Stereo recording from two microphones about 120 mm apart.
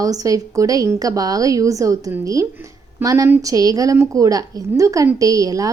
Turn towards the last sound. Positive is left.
turn(degrees=-30)  # may be behind; listen again after turning